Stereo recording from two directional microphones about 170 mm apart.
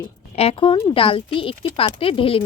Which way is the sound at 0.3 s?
35° left (ahead or behind).